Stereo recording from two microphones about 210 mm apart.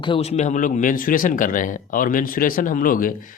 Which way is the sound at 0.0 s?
25° left (ahead or behind).